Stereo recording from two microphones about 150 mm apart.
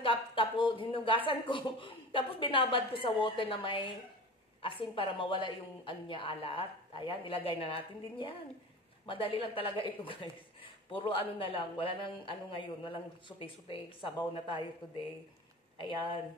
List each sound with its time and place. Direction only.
0.0 s speech: 35° left (ahead or behind)
15.8 s speech: 35° left (ahead or behind)